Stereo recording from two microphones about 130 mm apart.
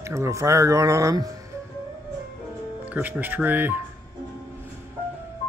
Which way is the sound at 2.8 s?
10° right (ahead or behind).